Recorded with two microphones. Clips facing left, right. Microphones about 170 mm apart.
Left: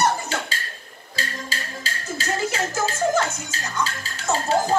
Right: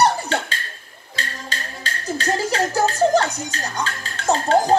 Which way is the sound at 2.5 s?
35° right (ahead or behind).